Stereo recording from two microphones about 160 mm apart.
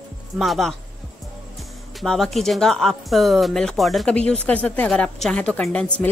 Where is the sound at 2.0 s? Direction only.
Centre (ahead or behind).